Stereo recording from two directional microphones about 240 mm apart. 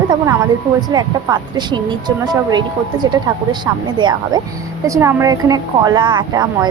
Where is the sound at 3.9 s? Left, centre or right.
Centre.